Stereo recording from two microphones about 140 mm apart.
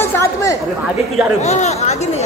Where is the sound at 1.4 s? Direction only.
55° left (ahead or behind).